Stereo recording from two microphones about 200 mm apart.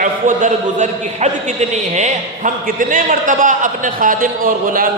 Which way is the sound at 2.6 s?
40° right (ahead or behind).